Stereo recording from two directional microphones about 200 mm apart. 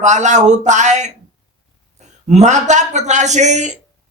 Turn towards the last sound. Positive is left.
turn(degrees=-35)  # may be behind; listen again after turning